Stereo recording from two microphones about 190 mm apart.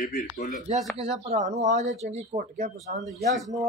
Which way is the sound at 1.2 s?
35° right (ahead or behind).